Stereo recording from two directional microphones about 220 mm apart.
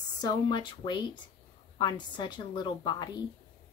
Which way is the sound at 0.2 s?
20° left (ahead or behind).